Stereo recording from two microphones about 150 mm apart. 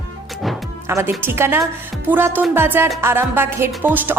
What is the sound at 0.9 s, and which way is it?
A woman's voice, 15° right (ahead or behind).